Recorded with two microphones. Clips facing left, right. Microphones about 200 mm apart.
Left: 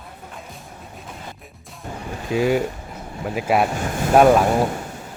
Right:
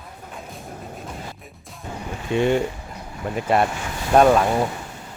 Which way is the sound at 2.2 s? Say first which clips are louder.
Even; 5° left (ahead or behind).